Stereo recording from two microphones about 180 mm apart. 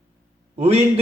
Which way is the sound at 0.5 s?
35° right (ahead or behind).